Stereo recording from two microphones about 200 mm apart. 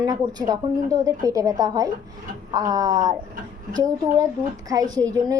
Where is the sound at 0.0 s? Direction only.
20° right (ahead or behind).